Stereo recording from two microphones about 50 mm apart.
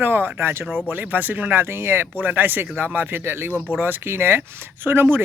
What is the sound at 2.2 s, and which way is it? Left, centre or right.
Speech, right.